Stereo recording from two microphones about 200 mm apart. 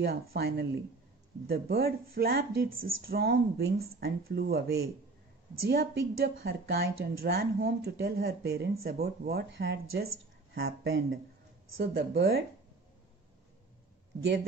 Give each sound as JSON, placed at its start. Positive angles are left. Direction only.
{"t": 0.0, "sound": "speech", "side_deg": -50}